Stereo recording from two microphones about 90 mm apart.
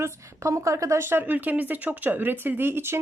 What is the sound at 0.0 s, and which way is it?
Speech, 35° right (ahead or behind).